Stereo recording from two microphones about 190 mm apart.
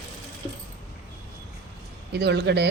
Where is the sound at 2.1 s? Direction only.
65° right (ahead or behind).